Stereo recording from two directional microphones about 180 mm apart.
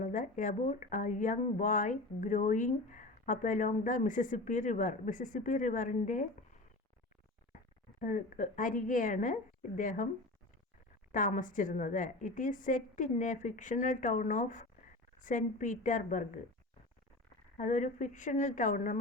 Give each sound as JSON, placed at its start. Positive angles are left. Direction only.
{"t": 0.0, "sound": "speech", "side_deg": 45}
{"t": 8.0, "sound": "speech", "side_deg": 45}
{"t": 11.1, "sound": "speech", "side_deg": 45}
{"t": 17.6, "sound": "speech", "side_deg": 45}